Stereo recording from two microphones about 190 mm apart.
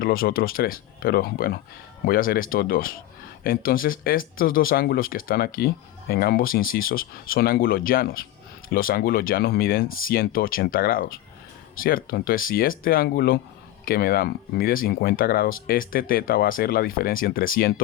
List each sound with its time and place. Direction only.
0.0 s speech: 50° left (ahead or behind)